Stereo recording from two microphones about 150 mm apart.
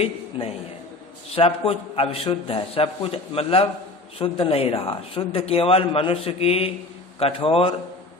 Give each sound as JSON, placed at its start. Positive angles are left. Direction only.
{"t": 0.0, "sound": "a man's voice", "side_deg": 40}